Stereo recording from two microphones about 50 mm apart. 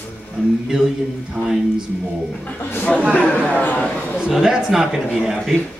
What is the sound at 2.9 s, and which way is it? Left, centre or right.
Speech, left.